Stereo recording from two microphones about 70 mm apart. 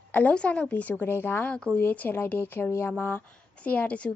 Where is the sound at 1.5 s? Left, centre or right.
Centre.